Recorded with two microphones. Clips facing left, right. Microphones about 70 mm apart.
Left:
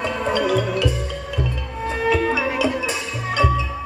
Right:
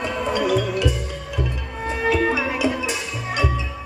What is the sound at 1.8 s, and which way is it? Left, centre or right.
Music, right.